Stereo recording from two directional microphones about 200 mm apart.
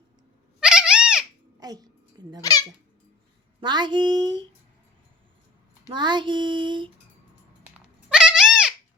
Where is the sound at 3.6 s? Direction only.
20° right (ahead or behind).